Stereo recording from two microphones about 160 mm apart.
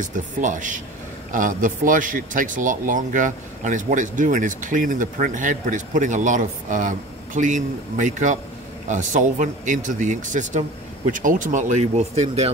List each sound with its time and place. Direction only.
0.0 s a man's voice: 50° right (ahead or behind)